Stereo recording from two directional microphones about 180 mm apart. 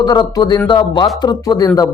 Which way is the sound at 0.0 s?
25° left (ahead or behind).